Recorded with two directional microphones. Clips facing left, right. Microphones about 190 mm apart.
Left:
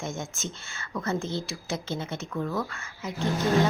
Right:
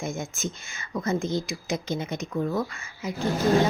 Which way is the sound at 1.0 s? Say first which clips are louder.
Right 4 dB; 15° right (ahead or behind).